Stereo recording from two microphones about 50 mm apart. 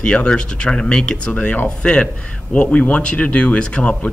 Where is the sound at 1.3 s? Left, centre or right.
Left.